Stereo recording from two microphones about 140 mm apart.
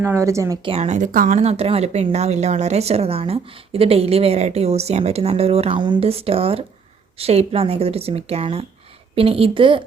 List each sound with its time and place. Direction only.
0.0 s speech: 20° right (ahead or behind)
0.6 s a woman's voice: 45° right (ahead or behind)